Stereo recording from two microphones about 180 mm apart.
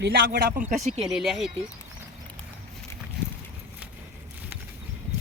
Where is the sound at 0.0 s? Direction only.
55° right (ahead or behind).